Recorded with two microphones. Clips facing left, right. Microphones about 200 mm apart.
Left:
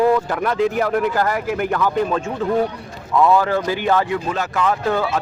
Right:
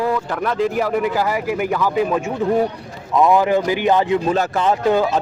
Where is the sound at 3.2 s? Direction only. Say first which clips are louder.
Right 1 dB; 15° right (ahead or behind).